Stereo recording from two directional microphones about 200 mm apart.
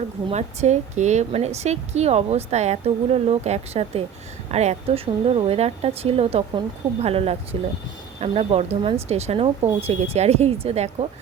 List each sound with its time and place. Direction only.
0.3 s a woman's voice: 35° right (ahead or behind)